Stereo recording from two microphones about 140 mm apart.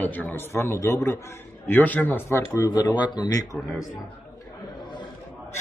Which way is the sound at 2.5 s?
25° left (ahead or behind).